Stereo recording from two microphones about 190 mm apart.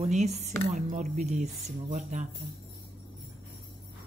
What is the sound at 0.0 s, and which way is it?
A woman's voice, 35° right (ahead or behind).